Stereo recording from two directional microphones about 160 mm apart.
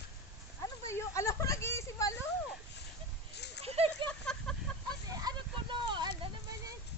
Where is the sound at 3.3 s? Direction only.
90° left.